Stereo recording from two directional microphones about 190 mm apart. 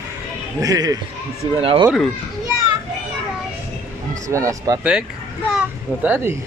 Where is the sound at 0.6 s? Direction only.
20° right (ahead or behind).